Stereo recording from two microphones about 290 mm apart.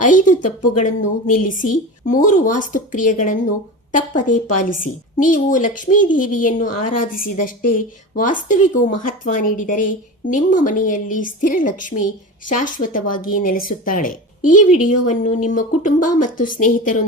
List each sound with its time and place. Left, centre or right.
0.0 s a woman's voice: left
16.0 s a woman's voice: left
16.4 s a woman's voice: left